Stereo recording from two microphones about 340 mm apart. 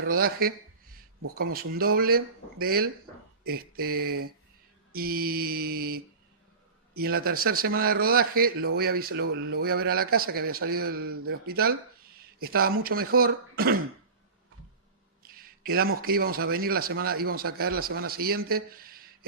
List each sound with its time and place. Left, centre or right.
0.0 s a man's voice: right
15.2 s a man's voice: right